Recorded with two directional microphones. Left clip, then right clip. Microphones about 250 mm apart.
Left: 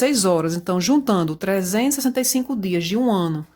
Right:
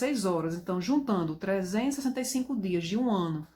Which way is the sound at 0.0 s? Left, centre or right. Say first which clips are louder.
Left 11 dB; left.